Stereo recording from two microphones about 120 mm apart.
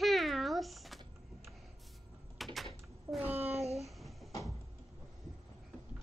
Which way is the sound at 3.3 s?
60° right (ahead or behind).